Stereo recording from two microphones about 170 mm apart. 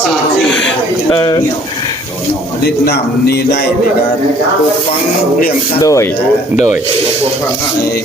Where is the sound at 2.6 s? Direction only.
70° left (ahead or behind).